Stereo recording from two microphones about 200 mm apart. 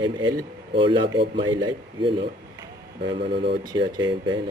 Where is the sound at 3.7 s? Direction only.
20° right (ahead or behind).